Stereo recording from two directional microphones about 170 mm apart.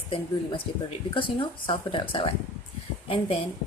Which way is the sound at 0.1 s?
30° left (ahead or behind).